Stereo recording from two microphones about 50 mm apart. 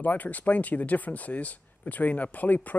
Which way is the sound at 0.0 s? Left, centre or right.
Left.